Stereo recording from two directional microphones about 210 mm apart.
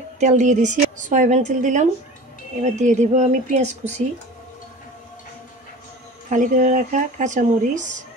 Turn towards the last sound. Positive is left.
turn(degrees=-35)  # may be behind; listen again after turning